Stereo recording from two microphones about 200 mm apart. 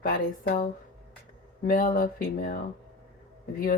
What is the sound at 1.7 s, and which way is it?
Speech, 45° left (ahead or behind).